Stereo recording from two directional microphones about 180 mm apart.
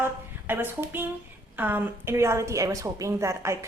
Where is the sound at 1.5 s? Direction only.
10° right (ahead or behind).